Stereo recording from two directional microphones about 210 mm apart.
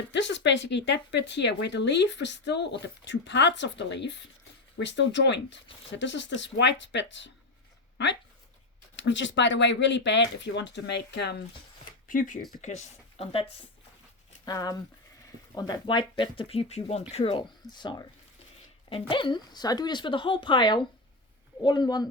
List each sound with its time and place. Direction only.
0.1 s speech: 55° left (ahead or behind)
12.0 s speech: 40° left (ahead or behind)
14.4 s speech: 15° left (ahead or behind)